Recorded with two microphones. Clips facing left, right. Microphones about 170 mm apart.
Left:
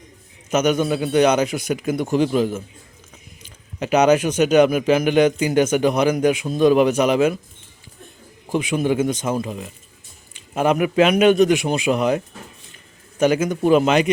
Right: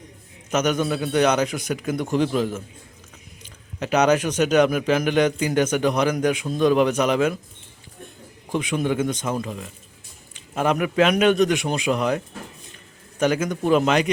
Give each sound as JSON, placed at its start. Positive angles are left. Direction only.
{"t": 0.5, "sound": "a man's voice", "side_deg": 5}
{"t": 8.4, "sound": "a man's voice", "side_deg": 5}